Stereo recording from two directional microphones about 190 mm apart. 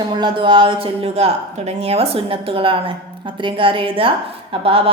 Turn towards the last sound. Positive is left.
turn(degrees=-30)  # may be behind; listen again after turning